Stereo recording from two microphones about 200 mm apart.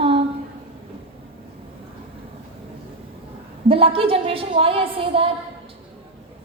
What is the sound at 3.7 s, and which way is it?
A woman's voice, 25° right (ahead or behind).